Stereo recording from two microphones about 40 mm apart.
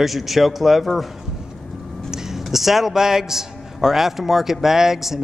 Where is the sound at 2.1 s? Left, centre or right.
Centre.